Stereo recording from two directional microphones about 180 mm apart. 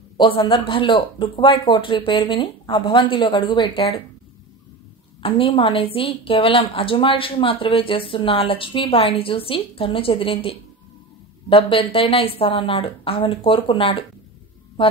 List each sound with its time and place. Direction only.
0.2 s speech: 25° left (ahead or behind)
5.2 s speech: 30° left (ahead or behind)